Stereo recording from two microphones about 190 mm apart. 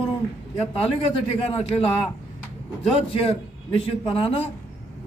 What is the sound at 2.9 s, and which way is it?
A man's voice, 30° left (ahead or behind).